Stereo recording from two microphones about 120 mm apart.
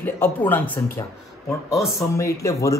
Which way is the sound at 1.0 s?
35° left (ahead or behind).